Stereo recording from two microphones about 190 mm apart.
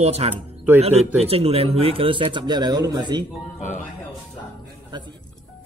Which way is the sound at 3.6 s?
40° left (ahead or behind).